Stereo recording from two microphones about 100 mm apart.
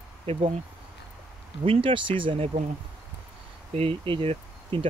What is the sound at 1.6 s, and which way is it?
Speech, 65° right (ahead or behind).